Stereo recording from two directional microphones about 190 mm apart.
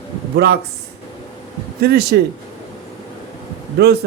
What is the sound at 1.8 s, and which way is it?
Speech, 55° right (ahead or behind).